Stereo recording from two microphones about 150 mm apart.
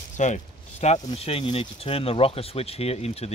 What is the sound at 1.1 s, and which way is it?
Speech, 40° left (ahead or behind).